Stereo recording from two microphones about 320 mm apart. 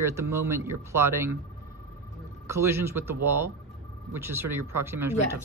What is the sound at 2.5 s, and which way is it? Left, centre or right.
Speech, centre.